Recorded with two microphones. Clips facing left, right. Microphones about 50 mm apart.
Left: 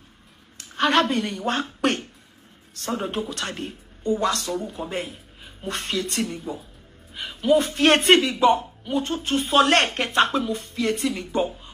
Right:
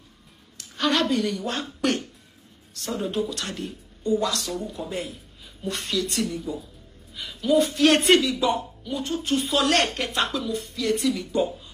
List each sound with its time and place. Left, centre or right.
0.6 s a woman's voice: left